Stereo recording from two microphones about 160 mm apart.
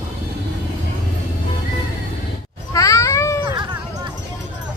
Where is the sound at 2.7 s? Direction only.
20° left (ahead or behind).